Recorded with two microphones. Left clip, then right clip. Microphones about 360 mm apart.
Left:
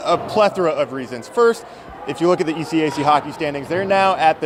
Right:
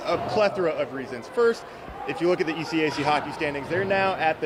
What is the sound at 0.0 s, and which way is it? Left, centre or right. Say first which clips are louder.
Speech: left 7 dB; left.